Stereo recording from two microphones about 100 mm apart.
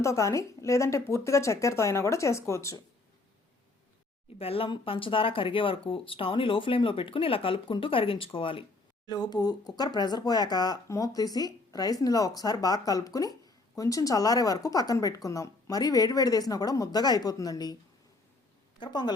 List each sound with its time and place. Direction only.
0.0 s speech: 30° left (ahead or behind)
4.4 s speech: 70° left (ahead or behind)
9.0 s speech: 45° left (ahead or behind)
18.8 s a woman's voice: 45° left (ahead or behind)